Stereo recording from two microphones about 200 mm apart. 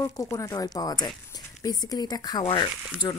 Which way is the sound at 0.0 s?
15° left (ahead or behind).